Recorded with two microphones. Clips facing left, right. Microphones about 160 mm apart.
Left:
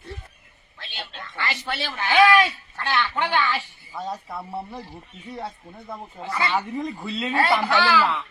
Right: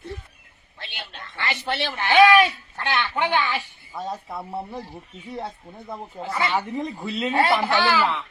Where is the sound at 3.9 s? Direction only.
Centre (ahead or behind).